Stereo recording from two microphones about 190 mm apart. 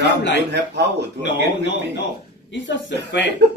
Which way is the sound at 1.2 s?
70° left (ahead or behind).